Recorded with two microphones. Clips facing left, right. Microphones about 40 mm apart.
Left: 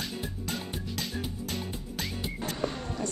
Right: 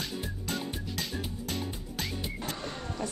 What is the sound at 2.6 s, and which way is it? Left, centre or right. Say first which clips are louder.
Vehicle: left 4 dB; centre.